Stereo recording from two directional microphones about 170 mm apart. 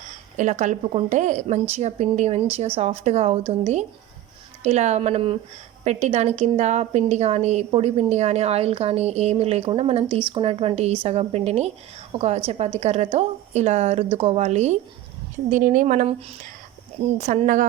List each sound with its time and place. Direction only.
0.3 s a woman's voice: 45° right (ahead or behind)
17.2 s a woman's voice: 45° right (ahead or behind)